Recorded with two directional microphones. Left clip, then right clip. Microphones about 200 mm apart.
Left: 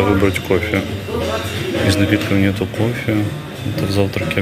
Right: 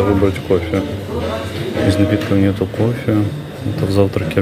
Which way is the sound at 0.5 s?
10° right (ahead or behind).